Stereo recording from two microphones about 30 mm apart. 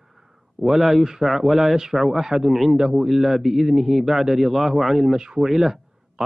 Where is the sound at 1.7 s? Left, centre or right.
Centre.